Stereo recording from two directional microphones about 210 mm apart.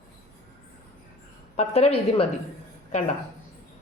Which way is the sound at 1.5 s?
30° left (ahead or behind).